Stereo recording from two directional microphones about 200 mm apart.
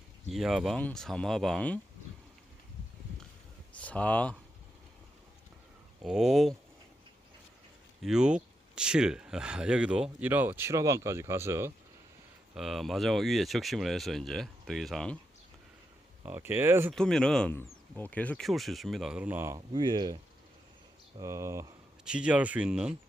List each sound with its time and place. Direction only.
0.3 s speech: centre (ahead or behind)
3.8 s speech: 5° left (ahead or behind)
6.0 s speech: centre (ahead or behind)
8.0 s speech: 5° right (ahead or behind)
12.5 s speech: centre (ahead or behind)
16.2 s speech: 10° right (ahead or behind)
16.9 s speech: 5° left (ahead or behind)
19.5 s speech: 20° right (ahead or behind)
21.2 s speech: 15° right (ahead or behind)